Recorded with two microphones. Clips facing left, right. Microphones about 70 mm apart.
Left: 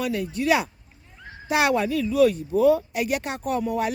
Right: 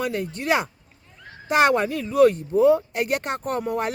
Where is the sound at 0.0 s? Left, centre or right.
Right.